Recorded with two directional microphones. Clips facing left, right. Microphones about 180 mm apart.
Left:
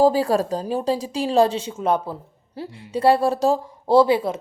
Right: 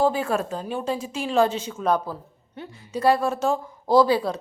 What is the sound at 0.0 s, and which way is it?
A woman's voice, 35° left (ahead or behind).